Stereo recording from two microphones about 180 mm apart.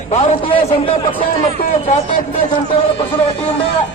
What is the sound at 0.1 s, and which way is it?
Speech, 30° left (ahead or behind).